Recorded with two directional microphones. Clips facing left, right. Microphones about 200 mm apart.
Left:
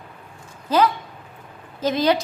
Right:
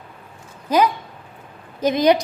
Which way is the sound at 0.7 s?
15° right (ahead or behind).